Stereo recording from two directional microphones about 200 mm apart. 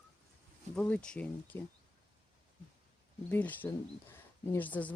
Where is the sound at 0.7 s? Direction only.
5° left (ahead or behind).